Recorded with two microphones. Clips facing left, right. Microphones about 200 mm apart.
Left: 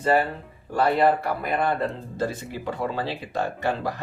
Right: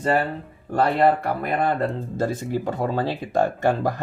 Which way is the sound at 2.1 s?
45° right (ahead or behind).